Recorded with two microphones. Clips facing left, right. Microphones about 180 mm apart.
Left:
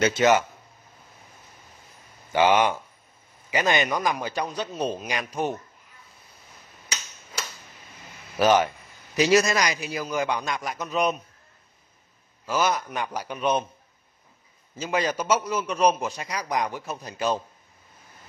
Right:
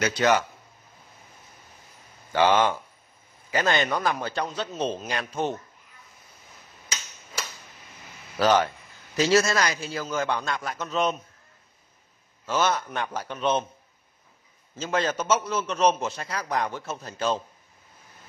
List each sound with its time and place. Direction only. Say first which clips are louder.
0.0 s a man's voice: left 3 dB; 20° left (ahead or behind)
2.3 s a man's voice: left 1 dB; 15° left (ahead or behind)
8.4 s a man's voice: left 1 dB; 20° left (ahead or behind)
12.4 s a man's voice: even; 10° left (ahead or behind)
14.8 s a man's voice: even; 15° left (ahead or behind)